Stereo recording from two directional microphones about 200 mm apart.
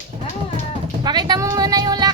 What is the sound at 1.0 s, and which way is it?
Music, 20° right (ahead or behind).